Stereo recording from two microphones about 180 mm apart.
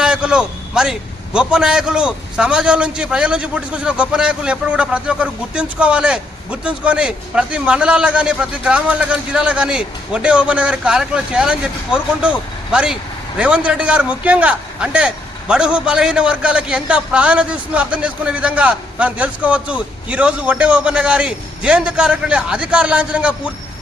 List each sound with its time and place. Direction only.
0.0 s a man's voice: 5° right (ahead or behind)